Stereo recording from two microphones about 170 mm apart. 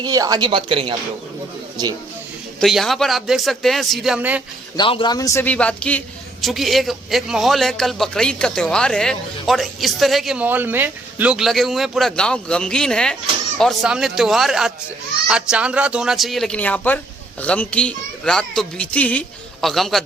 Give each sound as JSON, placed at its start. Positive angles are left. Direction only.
{"t": 0.0, "sound": "speech", "side_deg": -20}
{"t": 2.6, "sound": "a man's voice", "side_deg": 0}
{"t": 4.8, "sound": "a child's voice", "side_deg": 30}